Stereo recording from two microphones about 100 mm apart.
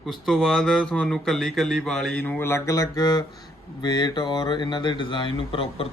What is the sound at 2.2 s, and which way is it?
Mantra, 20° left (ahead or behind).